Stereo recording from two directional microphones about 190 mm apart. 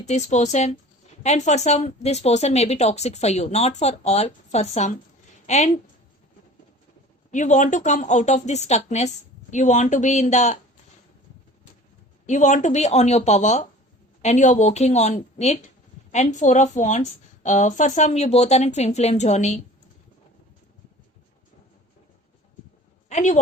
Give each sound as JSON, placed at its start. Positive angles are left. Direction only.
{"t": 0.0, "sound": "a woman's voice", "side_deg": 35}
{"t": 7.3, "sound": "speech", "side_deg": 40}
{"t": 12.2, "sound": "speech", "side_deg": 40}
{"t": 23.0, "sound": "a woman's voice", "side_deg": 40}